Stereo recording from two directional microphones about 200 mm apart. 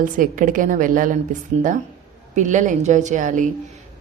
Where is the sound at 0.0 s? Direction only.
45° right (ahead or behind).